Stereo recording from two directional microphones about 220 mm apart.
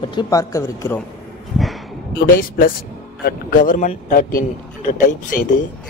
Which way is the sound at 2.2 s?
40° left (ahead or behind).